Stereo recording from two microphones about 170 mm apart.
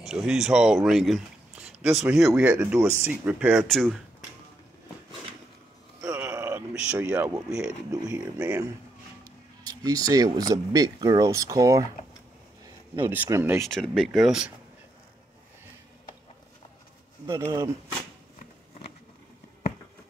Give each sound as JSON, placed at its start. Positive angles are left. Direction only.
{"t": 0.0, "sound": "speech", "side_deg": -5}
{"t": 6.0, "sound": "a sound", "side_deg": -5}
{"t": 7.4, "sound": "speech", "side_deg": -5}
{"t": 9.2, "sound": "speech", "side_deg": -20}
{"t": 13.0, "sound": "speech", "side_deg": -10}
{"t": 13.7, "sound": "speech", "side_deg": 0}
{"t": 17.4, "sound": "speech", "side_deg": -15}